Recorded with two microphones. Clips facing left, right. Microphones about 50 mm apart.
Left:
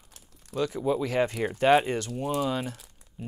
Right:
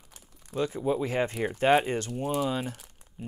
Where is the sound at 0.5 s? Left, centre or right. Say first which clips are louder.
Left 1 dB; centre.